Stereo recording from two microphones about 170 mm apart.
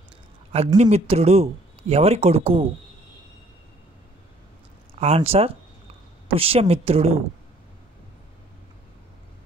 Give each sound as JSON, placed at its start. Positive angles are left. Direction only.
{"t": 0.7, "sound": "speech", "side_deg": -40}
{"t": 4.9, "sound": "speech", "side_deg": -40}